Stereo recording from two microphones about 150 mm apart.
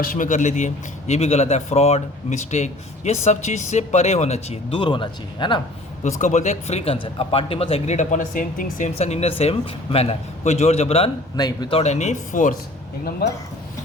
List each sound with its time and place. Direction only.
0.0 s speech: 65° left (ahead or behind); by 5.6 s 30° left (ahead or behind)
6.0 s speech: 55° left (ahead or behind)
9.0 s speech: 45° left (ahead or behind)
11.3 s speech: 25° left (ahead or behind)
11.7 s speech: 45° left (ahead or behind)